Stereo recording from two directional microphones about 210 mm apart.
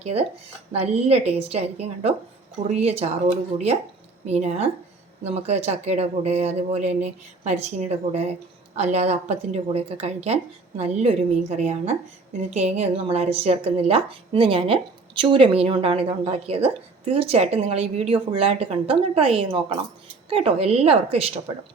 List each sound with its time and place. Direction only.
0.0 s a woman's voice: 30° right (ahead or behind)
4.3 s a woman's voice: 30° right (ahead or behind)